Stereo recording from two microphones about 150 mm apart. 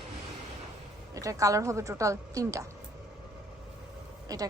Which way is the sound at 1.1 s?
20° right (ahead or behind).